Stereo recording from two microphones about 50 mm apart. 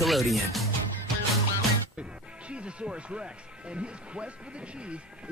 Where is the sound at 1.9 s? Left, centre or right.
Right.